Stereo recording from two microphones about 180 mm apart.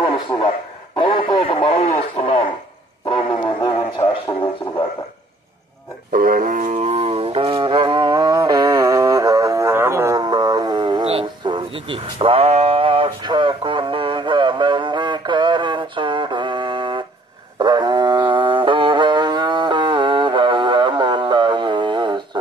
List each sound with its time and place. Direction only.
0.9 s radio: 25° left (ahead or behind)
6.1 s music: 50° right (ahead or behind); by 17.0 s 25° right (ahead or behind)
17.6 s wild animals: 25° right (ahead or behind)